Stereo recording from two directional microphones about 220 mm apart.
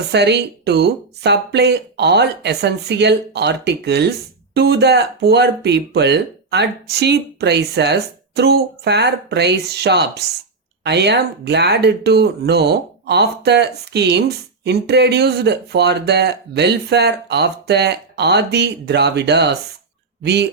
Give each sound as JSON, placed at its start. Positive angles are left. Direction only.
{"t": 0.1, "sound": "speech", "side_deg": -50}